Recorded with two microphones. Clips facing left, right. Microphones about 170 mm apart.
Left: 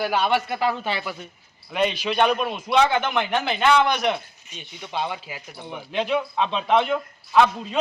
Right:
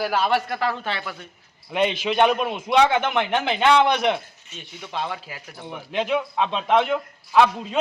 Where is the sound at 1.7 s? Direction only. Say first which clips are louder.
Right 1 dB; 20° right (ahead or behind).